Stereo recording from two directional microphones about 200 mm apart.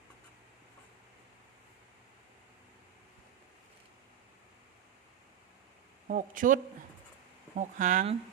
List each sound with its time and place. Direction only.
6.1 s speech: 40° right (ahead or behind)